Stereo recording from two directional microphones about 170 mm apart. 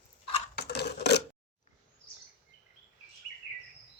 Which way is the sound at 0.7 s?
75° left (ahead or behind).